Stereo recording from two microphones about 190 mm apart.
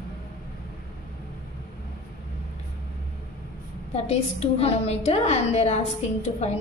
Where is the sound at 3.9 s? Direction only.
35° left (ahead or behind).